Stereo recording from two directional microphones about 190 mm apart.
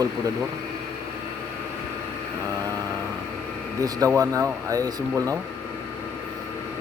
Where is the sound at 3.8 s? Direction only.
20° right (ahead or behind).